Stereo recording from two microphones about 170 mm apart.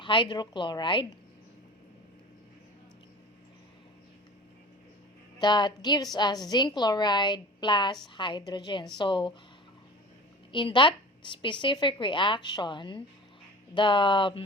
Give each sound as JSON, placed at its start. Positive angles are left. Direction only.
{"t": 0.0, "sound": "a woman's voice", "side_deg": 30}
{"t": 5.4, "sound": "a woman's voice", "side_deg": 25}
{"t": 10.5, "sound": "a woman's voice", "side_deg": 30}